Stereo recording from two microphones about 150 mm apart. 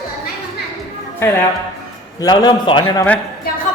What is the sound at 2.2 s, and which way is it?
Speech, 25° left (ahead or behind).